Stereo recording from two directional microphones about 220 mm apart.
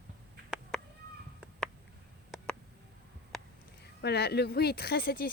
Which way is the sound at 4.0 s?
50° left (ahead or behind).